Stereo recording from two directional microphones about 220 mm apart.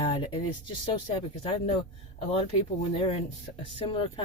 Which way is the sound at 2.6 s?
25° left (ahead or behind).